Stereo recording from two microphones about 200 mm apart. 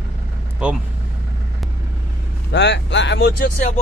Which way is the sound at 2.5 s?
60° left (ahead or behind).